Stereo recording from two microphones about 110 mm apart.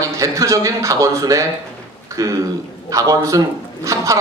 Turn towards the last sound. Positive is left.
turn(degrees=-30)  # may be behind; listen again after turning